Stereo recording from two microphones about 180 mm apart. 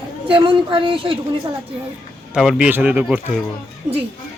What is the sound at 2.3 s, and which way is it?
Speech, 5° right (ahead or behind).